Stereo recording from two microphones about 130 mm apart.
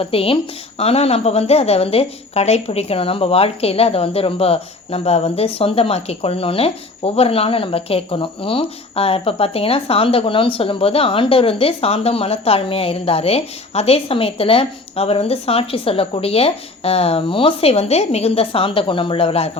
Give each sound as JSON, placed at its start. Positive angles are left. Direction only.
{"t": 0.0, "sound": "a woman's voice", "side_deg": 45}